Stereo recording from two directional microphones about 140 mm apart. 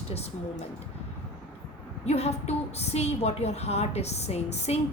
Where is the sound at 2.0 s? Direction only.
50° left (ahead or behind).